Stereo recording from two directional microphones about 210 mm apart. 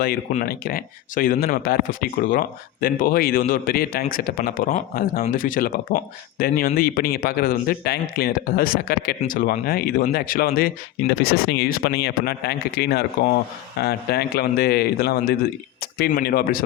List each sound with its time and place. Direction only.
0.0 s speech: 45° left (ahead or behind)